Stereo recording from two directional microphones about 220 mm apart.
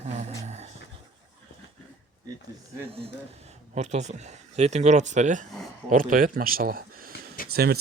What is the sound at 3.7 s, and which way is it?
Speech, 30° right (ahead or behind).